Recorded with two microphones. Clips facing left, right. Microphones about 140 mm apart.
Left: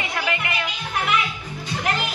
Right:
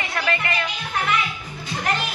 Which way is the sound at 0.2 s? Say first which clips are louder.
Right 3 dB; 15° left (ahead or behind).